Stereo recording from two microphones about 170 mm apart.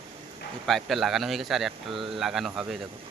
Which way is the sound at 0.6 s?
Centre (ahead or behind).